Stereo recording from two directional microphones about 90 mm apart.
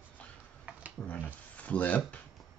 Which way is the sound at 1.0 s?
20° left (ahead or behind).